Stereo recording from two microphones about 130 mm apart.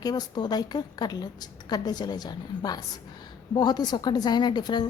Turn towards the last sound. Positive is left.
turn(degrees=35)  # may be behind; listen again after turning